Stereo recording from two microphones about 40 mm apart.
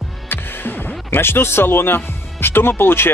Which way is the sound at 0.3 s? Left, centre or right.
Left.